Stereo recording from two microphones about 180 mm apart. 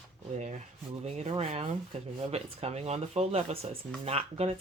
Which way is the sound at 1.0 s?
35° right (ahead or behind).